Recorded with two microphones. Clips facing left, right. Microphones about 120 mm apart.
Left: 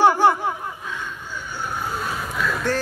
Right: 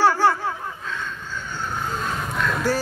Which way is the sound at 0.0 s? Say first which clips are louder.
Left 2 dB; 15° left (ahead or behind).